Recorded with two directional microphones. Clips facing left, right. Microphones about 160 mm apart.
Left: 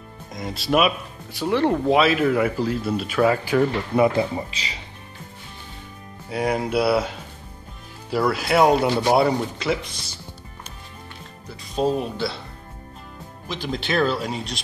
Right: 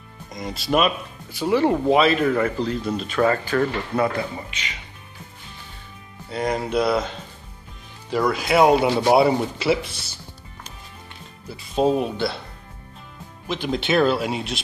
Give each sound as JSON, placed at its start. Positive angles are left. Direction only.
{"t": 0.3, "sound": "speech", "side_deg": 0}
{"t": 4.5, "sound": "speech", "side_deg": 35}
{"t": 6.2, "sound": "speech", "side_deg": 10}
{"t": 11.7, "sound": "speech", "side_deg": 0}
{"t": 13.7, "sound": "speech", "side_deg": 0}